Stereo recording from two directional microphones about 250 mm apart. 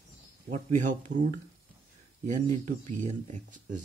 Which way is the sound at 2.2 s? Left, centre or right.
Right.